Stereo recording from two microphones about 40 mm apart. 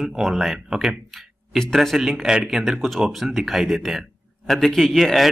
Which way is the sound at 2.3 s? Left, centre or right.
Centre.